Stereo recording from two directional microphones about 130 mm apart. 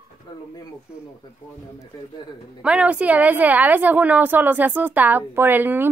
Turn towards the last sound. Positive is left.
turn(degrees=-15)  # may be behind; listen again after turning